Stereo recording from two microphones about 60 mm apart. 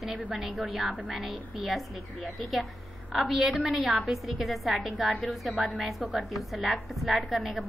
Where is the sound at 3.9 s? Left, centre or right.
Centre.